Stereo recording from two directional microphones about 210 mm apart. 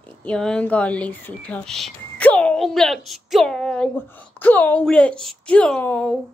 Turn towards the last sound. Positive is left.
turn(degrees=5)  # may be behind; listen again after turning